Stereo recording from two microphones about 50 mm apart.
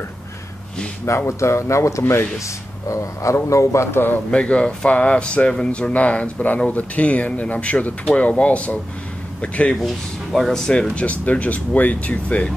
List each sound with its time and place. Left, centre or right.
1.0 s speech: left
2.4 s speech: left
4.3 s speech: left
10.3 s speech: centre
10.7 s speech: left